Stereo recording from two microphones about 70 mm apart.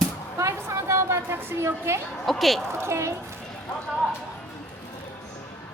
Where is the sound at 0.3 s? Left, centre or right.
Right.